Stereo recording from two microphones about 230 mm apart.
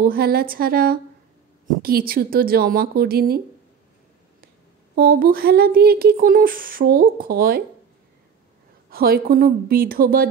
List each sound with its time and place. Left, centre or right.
0.0 s speech: right
4.9 s speech: right
8.9 s speech: right